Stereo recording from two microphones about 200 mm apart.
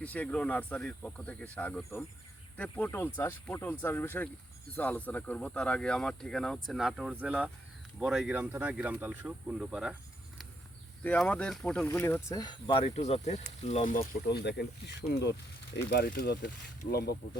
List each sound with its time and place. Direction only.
0.0 s speech: 5° left (ahead or behind)
11.0 s speech: 5° left (ahead or behind); by 16.5 s 50° left (ahead or behind)